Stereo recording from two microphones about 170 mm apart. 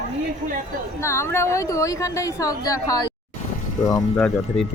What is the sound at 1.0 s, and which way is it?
Speech, 15° left (ahead or behind).